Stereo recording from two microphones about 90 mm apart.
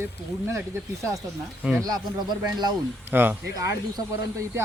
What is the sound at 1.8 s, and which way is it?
Speech, 50° right (ahead or behind).